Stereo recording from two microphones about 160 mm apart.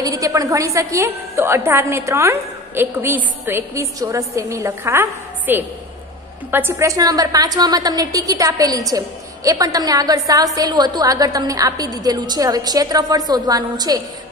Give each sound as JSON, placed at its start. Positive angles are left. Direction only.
{"t": 0.0, "sound": "a woman's voice", "side_deg": -20}